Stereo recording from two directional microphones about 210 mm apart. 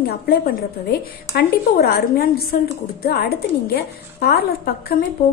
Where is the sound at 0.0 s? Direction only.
45° left (ahead or behind).